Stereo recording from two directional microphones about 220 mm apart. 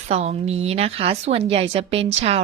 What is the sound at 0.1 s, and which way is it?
A woman's voice, 30° right (ahead or behind).